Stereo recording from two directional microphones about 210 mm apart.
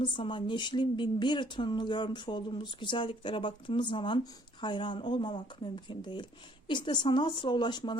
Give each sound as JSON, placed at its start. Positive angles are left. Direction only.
{"t": 0.0, "sound": "speech", "side_deg": 25}